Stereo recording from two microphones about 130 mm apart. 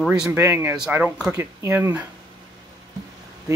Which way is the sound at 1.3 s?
20° right (ahead or behind).